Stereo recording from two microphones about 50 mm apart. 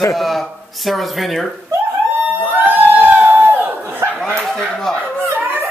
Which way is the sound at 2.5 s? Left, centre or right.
Right.